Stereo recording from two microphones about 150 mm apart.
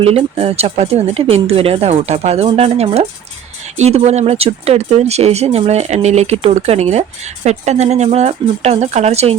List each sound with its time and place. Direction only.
0.0 s speech: 40° right (ahead or behind)